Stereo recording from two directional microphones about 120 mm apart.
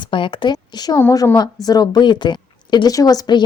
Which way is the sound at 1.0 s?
20° left (ahead or behind).